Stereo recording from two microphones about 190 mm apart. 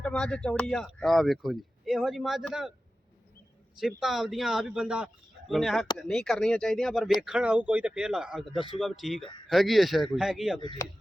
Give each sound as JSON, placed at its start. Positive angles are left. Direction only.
{"t": 0.0, "sound": "speech", "side_deg": 5}
{"t": 3.8, "sound": "speech", "side_deg": 0}
{"t": 10.6, "sound": "speech", "side_deg": 25}